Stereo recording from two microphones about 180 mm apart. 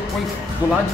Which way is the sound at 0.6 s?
10° right (ahead or behind).